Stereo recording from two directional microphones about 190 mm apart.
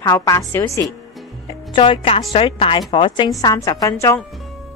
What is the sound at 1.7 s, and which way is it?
A woman's voice, 25° left (ahead or behind).